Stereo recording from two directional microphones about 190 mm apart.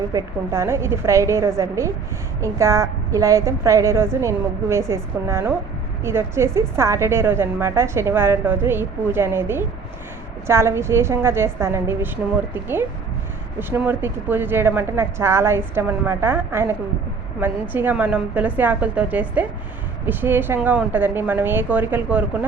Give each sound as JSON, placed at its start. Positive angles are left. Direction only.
{"t": 0.1, "sound": "a woman's voice", "side_deg": -15}